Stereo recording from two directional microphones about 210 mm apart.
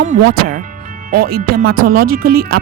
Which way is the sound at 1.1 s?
45° right (ahead or behind).